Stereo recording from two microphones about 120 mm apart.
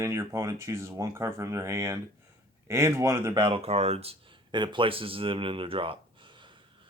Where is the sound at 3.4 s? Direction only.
55° right (ahead or behind).